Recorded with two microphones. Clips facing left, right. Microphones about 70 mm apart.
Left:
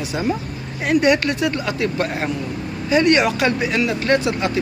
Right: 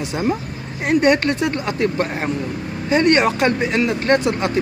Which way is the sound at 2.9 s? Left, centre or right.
Right.